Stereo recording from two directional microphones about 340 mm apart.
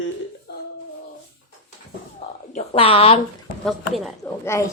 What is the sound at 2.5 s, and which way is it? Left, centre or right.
Speech, centre.